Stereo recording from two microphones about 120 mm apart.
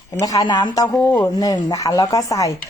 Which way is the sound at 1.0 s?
15° left (ahead or behind).